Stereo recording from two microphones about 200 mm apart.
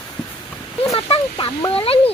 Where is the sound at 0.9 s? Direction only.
25° left (ahead or behind).